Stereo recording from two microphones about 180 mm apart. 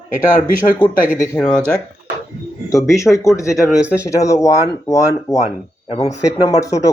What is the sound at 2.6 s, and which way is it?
Speech, 15° left (ahead or behind).